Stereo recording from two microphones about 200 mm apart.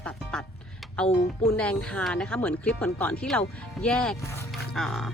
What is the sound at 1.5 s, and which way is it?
Speech, 5° left (ahead or behind).